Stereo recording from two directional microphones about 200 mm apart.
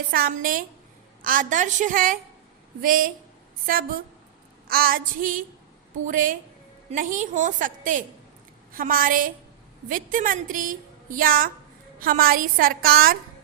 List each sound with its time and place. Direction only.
0.1 s a woman's voice: 45° right (ahead or behind)
4.7 s a woman's voice: 45° right (ahead or behind)